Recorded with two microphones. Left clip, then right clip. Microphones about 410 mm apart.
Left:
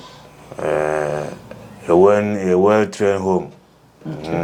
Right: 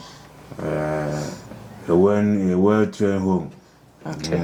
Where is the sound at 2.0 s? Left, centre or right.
Left.